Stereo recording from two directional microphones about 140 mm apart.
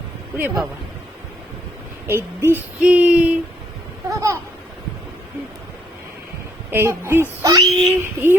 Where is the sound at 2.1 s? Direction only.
15° right (ahead or behind).